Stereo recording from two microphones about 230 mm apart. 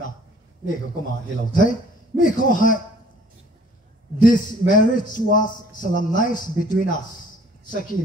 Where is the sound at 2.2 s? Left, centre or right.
Left.